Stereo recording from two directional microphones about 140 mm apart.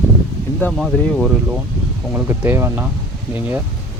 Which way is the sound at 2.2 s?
15° right (ahead or behind).